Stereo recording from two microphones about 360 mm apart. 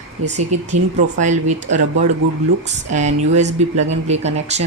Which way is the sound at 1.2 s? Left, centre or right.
Centre.